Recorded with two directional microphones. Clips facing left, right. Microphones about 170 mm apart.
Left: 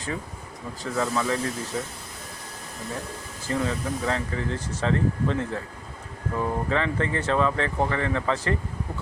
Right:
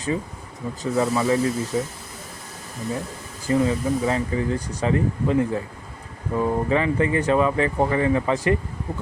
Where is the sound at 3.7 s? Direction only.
10° right (ahead or behind).